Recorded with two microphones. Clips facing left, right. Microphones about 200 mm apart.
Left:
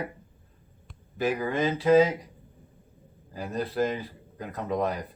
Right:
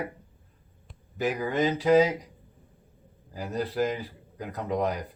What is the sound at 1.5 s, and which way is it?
Speech, 20° right (ahead or behind).